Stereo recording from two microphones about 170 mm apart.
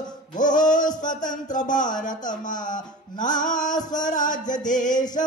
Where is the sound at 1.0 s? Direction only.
50° left (ahead or behind).